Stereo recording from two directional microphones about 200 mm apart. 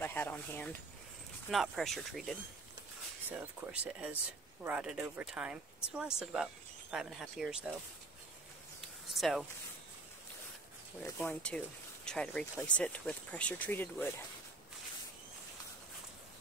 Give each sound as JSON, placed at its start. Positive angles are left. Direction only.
{"t": 0.0, "sound": "a sound", "side_deg": 10}
{"t": 1.5, "sound": "speech", "side_deg": 0}
{"t": 9.1, "sound": "speech", "side_deg": 0}
{"t": 11.1, "sound": "speech", "side_deg": 5}